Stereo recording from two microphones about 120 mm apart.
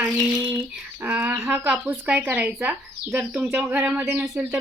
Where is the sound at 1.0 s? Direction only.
15° right (ahead or behind).